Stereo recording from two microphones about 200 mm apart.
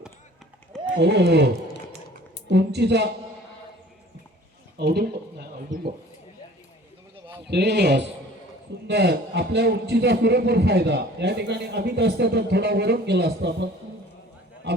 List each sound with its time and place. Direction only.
1.0 s a man's voice: 55° right (ahead or behind)
2.5 s a man's voice: 60° right (ahead or behind)
4.8 s speech: 55° right (ahead or behind)
7.4 s a man's voice: 55° right (ahead or behind)
14.7 s a man's voice: 55° right (ahead or behind)